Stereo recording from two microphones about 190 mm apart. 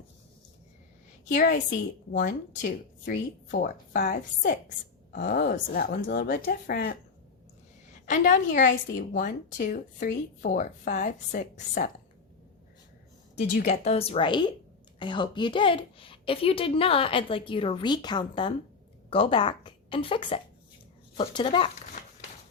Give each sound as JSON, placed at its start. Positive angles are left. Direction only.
{"t": 1.3, "sound": "a woman's voice", "side_deg": 40}
{"t": 5.1, "sound": "speech", "side_deg": 50}
{"t": 8.0, "sound": "speech", "side_deg": 40}
{"t": 13.6, "sound": "a woman's voice", "side_deg": 35}